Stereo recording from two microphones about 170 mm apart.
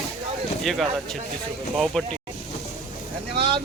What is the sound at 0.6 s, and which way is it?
Speech, centre (ahead or behind).